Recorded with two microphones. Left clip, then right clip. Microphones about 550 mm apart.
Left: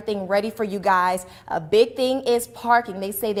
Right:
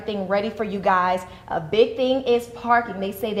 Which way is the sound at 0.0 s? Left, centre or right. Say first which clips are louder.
Left 1 dB; left.